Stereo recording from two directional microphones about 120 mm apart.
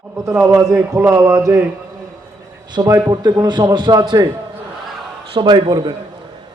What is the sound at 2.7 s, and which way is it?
A man's voice, 30° right (ahead or behind).